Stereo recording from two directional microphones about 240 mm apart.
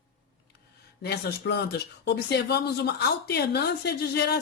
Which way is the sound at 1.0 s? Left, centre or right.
Left.